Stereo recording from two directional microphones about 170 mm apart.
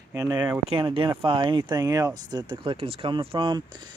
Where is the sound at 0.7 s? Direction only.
30° right (ahead or behind).